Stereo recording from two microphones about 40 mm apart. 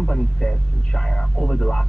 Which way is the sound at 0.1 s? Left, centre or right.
Centre.